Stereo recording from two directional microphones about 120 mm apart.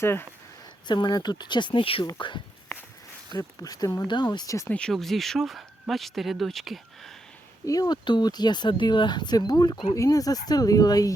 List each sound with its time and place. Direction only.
0.0 s speech: 20° left (ahead or behind)
0.9 s speech: 40° left (ahead or behind)
4.7 s speech: 5° left (ahead or behind)
7.6 s speech: 30° left (ahead or behind)